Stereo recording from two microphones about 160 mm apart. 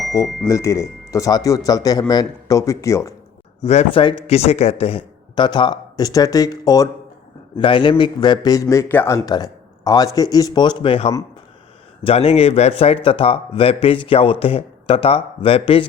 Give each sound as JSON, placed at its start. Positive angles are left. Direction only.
{"t": 0.4, "sound": "speech", "side_deg": 20}
{"t": 3.6, "sound": "a man's voice", "side_deg": 40}